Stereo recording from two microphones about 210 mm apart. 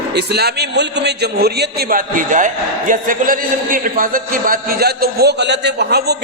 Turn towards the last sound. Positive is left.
turn(degrees=-50)  # may be behind; listen again after turning